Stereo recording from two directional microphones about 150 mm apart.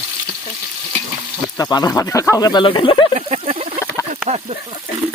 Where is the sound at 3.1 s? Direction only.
50° right (ahead or behind).